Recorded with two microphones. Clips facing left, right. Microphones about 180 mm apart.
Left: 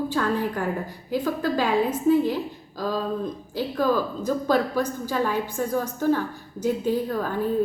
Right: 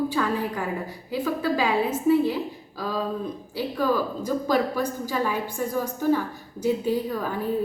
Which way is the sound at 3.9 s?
10° right (ahead or behind).